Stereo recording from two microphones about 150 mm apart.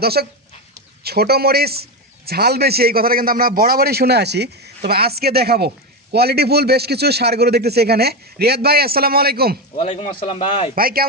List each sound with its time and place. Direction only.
0.0 s a man's voice: 90° right
9.8 s speech: 40° left (ahead or behind)
10.7 s speech: 80° right